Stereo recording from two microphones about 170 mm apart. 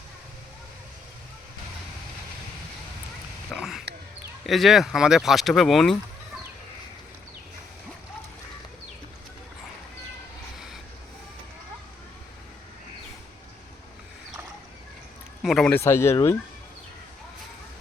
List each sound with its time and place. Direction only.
3.5 s a sound: centre (ahead or behind)
4.4 s speech: centre (ahead or behind)
15.4 s a man's voice: centre (ahead or behind)
15.8 s speech: 15° left (ahead or behind)